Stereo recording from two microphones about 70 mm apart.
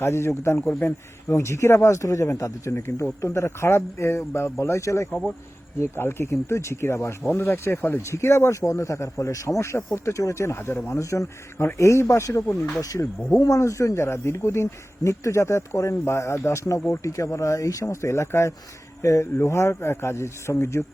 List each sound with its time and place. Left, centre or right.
0.0 s speech: left
8.0 s speech: left